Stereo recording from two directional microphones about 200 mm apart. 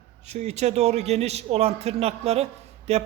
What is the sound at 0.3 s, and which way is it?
A man's voice, 35° right (ahead or behind).